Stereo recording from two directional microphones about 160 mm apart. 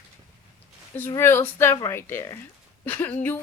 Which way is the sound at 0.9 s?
15° left (ahead or behind).